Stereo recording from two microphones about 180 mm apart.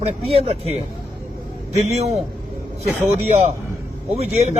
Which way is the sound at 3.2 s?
35° right (ahead or behind).